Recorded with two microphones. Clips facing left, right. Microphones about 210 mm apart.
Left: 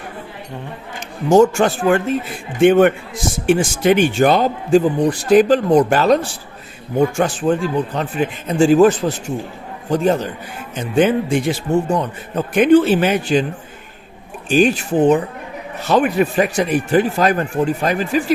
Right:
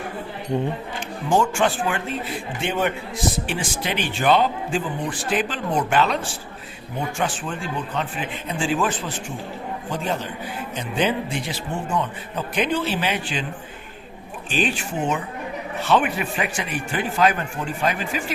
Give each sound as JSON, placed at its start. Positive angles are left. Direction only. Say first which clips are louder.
{"t": 1.3, "sound": "a man's voice", "louder": "left 8 dB", "side_deg": 40}
{"t": 2.6, "sound": "a man's voice", "louder": "left 14 dB", "side_deg": 55}
{"t": 7.2, "sound": "a man's voice", "louder": "left 10 dB", "side_deg": 40}
{"t": 14.5, "sound": "speech", "louder": "left 10 dB", "side_deg": 40}